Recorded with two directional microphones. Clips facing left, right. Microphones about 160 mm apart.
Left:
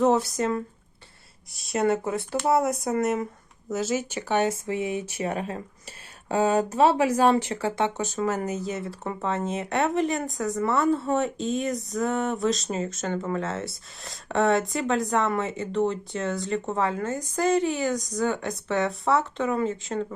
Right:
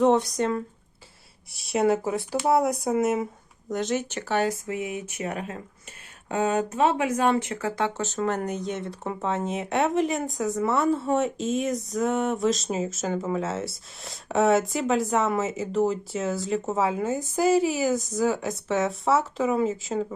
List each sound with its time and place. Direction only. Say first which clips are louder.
0.0 s speech: right 1 dB; centre (ahead or behind)
4.3 s speech: left 1 dB; 20° left (ahead or behind)
7.9 s speech: even; 15° left (ahead or behind); by 20.1 s 5° right (ahead or behind)